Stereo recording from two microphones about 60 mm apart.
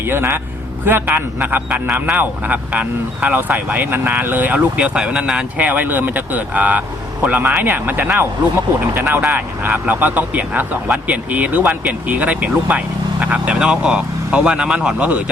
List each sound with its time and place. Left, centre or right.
0.0 s speech: right
1.0 s speech: right
4.5 s speech: centre